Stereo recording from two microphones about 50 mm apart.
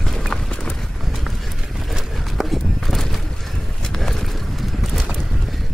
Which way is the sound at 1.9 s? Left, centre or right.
Centre.